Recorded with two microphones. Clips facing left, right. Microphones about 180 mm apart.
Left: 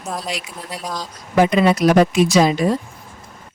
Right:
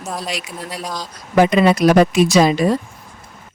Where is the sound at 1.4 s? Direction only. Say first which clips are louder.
Right 2 dB; 75° right (ahead or behind).